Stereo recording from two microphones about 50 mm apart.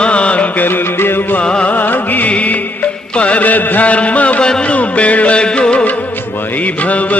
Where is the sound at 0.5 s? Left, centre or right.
Left.